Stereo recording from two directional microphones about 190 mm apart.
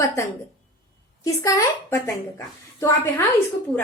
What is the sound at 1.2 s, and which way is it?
A woman's voice, 15° left (ahead or behind).